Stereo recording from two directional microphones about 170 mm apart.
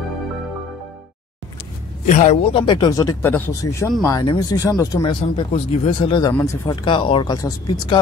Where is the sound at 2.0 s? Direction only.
45° left (ahead or behind).